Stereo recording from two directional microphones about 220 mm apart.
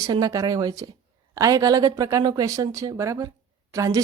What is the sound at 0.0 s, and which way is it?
A woman's voice, 15° right (ahead or behind).